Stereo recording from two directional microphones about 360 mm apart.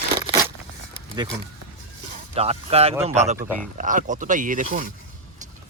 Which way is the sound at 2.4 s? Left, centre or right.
Centre.